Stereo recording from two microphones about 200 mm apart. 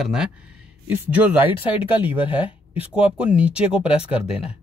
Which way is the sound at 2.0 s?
10° right (ahead or behind).